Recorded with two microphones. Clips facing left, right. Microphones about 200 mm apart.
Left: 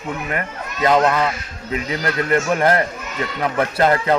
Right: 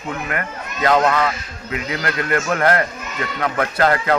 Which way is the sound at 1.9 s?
30° left (ahead or behind).